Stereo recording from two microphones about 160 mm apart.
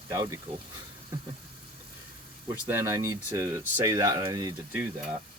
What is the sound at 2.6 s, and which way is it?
Speech, 15° right (ahead or behind).